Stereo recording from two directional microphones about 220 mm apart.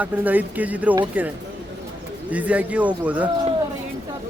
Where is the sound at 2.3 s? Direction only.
5° right (ahead or behind).